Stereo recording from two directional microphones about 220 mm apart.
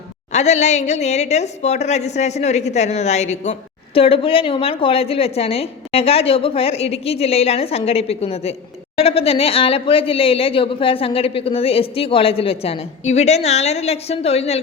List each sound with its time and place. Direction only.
0.3 s a woman's voice: 30° left (ahead or behind)